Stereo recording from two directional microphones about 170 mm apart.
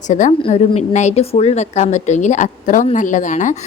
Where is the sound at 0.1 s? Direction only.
45° left (ahead or behind).